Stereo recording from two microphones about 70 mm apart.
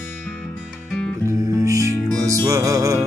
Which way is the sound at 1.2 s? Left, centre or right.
Right.